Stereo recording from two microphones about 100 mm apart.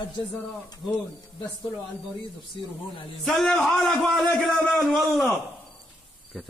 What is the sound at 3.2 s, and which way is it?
A man's voice, 5° left (ahead or behind).